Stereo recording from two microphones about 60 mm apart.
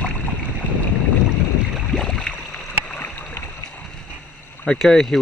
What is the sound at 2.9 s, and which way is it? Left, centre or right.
Boat, left.